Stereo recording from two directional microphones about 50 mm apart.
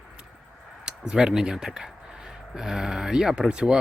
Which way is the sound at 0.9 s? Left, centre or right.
Centre.